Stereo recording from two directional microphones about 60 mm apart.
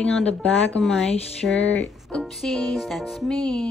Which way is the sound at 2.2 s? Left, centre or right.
Centre.